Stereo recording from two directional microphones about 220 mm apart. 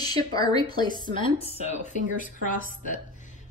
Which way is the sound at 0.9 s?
40° right (ahead or behind).